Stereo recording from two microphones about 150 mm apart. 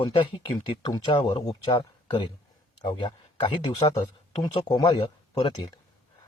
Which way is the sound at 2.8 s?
35° left (ahead or behind).